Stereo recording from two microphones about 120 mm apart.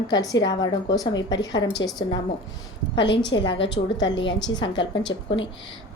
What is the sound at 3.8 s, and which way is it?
Speech, 75° left (ahead or behind).